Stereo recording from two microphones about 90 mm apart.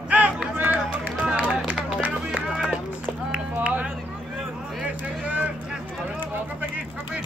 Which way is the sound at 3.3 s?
15° right (ahead or behind).